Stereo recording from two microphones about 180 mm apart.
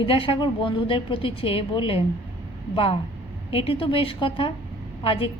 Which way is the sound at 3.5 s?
30° left (ahead or behind).